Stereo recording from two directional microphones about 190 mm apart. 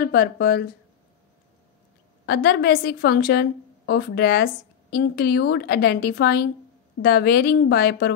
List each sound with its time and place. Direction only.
0.0 s a woman's voice: 55° left (ahead or behind)
2.2 s a woman's voice: 55° left (ahead or behind)